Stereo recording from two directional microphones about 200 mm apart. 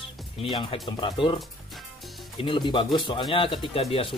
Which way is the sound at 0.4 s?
25° left (ahead or behind).